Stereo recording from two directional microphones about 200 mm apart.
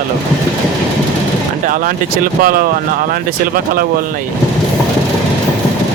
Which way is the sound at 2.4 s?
45° right (ahead or behind).